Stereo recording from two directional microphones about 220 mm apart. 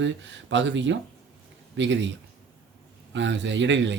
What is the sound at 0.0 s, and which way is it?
A man's voice, 55° right (ahead or behind).